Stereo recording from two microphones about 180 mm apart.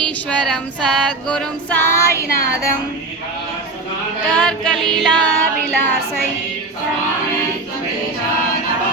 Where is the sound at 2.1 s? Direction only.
15° left (ahead or behind).